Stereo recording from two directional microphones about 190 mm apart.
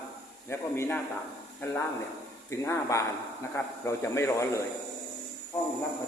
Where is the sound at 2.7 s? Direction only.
15° left (ahead or behind).